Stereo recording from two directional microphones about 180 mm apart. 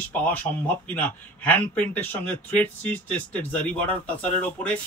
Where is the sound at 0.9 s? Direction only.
10° left (ahead or behind).